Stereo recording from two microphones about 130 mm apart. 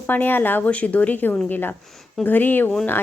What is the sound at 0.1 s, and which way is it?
A woman's voice, 15° left (ahead or behind).